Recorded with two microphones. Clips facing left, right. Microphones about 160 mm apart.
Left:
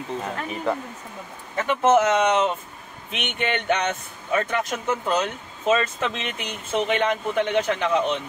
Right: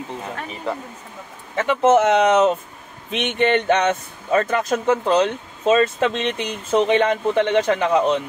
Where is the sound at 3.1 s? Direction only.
35° right (ahead or behind).